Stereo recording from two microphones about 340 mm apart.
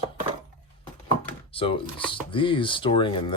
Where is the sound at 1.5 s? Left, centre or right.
Centre.